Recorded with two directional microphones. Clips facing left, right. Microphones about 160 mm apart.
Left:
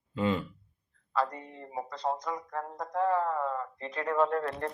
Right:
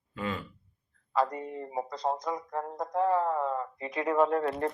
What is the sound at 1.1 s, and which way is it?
Speech, 15° right (ahead or behind).